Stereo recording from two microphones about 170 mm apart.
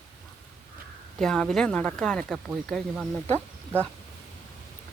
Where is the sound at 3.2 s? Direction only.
10° left (ahead or behind).